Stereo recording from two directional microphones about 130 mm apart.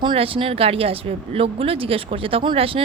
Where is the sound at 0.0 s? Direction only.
40° right (ahead or behind).